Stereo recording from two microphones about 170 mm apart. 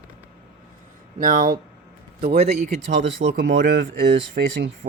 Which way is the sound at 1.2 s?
50° right (ahead or behind).